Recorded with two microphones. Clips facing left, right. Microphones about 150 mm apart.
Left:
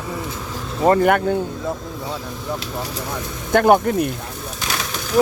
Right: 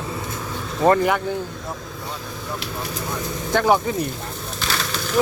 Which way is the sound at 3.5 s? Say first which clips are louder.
Left 4 dB; 55° left (ahead or behind).